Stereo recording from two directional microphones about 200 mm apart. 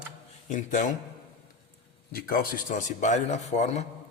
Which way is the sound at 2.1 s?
45° left (ahead or behind).